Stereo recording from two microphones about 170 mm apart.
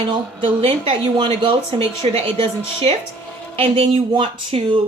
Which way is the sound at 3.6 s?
35° right (ahead or behind).